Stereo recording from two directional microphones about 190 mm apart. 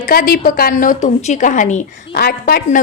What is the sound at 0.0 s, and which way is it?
A woman's voice, 50° left (ahead or behind).